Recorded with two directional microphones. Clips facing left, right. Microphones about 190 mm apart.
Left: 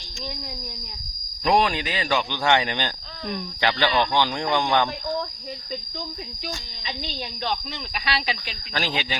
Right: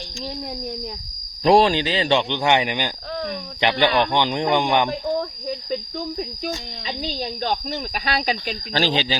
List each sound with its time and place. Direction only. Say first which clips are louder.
1.5 s speech: right 6 dB; 30° right (ahead or behind)
8.0 s speech: right 4 dB; 45° right (ahead or behind)
8.7 s speech: right 6 dB; 30° right (ahead or behind)